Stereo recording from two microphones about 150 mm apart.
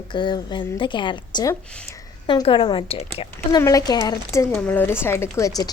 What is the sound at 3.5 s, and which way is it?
Speech, 25° left (ahead or behind).